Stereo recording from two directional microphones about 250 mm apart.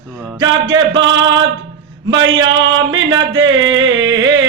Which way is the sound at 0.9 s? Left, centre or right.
Right.